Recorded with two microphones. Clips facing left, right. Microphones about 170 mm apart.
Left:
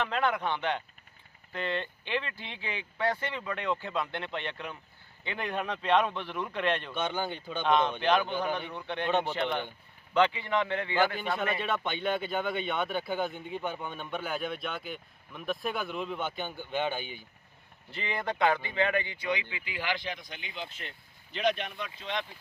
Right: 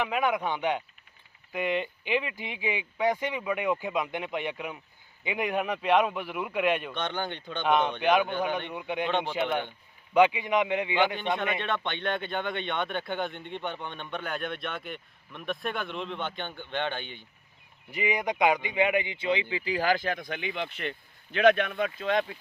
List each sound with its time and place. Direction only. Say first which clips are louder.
0.0 s speech: right 2 dB; 10° right (ahead or behind)
6.9 s speech: even; 5° left (ahead or behind)
7.7 s speech: right 2 dB; 10° right (ahead or behind)
11.6 s speech: even; 5° left (ahead or behind)
17.9 s speech: right 5 dB; 15° right (ahead or behind); by 22.3 s 50° right (ahead or behind)